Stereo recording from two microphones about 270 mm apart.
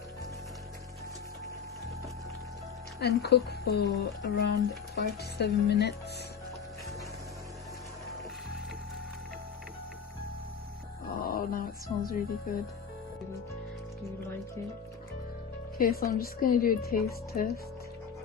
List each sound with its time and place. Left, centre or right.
3.0 s a woman's voice: left
11.2 s a sound: left
12.5 s a woman's voice: left
15.8 s a woman's voice: left